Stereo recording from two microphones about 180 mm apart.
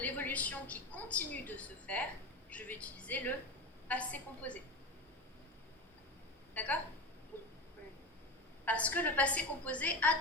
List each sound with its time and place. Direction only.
0.0 s a woman's voice: 10° left (ahead or behind)
6.5 s speech: 10° left (ahead or behind)
7.3 s a sound: 10° left (ahead or behind)
8.6 s a woman's voice: 10° left (ahead or behind)